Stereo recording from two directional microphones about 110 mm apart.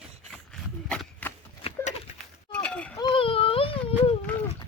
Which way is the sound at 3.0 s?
55° left (ahead or behind).